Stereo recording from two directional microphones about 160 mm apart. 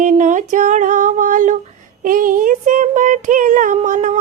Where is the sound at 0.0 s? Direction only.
50° right (ahead or behind).